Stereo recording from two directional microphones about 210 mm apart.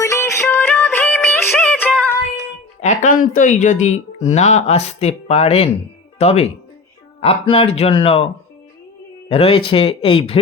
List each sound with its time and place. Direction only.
0.0 s music: 15° left (ahead or behind)
2.8 s speech: 40° left (ahead or behind)
9.3 s speech: 25° left (ahead or behind)